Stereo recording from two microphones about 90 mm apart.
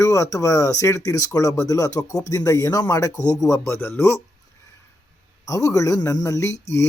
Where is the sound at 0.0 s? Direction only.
35° left (ahead or behind).